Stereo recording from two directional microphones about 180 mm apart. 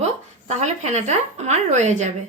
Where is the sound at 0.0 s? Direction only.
40° right (ahead or behind).